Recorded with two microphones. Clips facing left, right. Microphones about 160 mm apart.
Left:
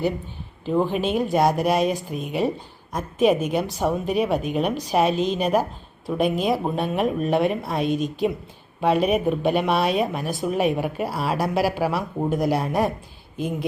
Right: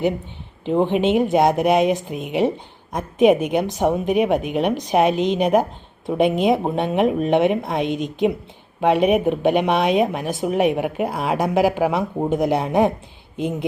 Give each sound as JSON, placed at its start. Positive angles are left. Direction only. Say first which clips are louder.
{"t": 0.6, "sound": "speech", "louder": "right 4 dB", "side_deg": -20}